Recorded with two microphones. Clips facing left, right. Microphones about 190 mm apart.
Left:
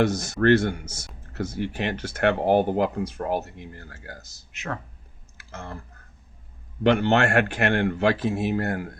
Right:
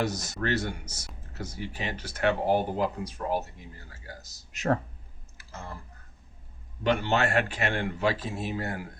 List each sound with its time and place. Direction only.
0.0 s speech: 55° left (ahead or behind)
4.5 s speech: 40° right (ahead or behind)
5.4 s clicking: 70° left (ahead or behind)
6.8 s speech: 65° left (ahead or behind)